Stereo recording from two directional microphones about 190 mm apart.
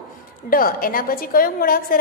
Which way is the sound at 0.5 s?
50° left (ahead or behind).